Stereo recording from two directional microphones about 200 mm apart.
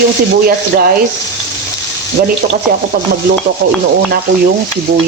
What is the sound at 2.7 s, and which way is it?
Speech, 45° right (ahead or behind).